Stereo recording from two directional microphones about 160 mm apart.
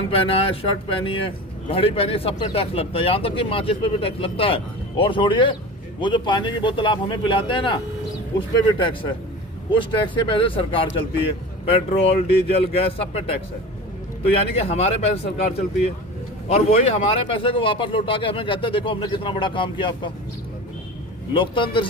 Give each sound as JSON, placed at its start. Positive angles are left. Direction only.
{"t": 0.1, "sound": "speech", "side_deg": 35}
{"t": 14.7, "sound": "speech", "side_deg": 40}
{"t": 21.3, "sound": "speech", "side_deg": 30}